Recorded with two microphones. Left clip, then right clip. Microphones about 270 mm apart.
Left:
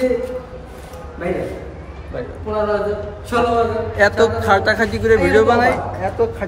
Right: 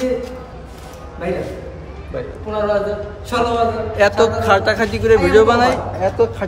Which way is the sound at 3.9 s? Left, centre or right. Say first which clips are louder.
Even; centre.